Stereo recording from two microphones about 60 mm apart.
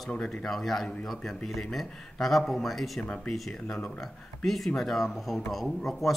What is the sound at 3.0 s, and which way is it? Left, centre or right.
Speech, centre.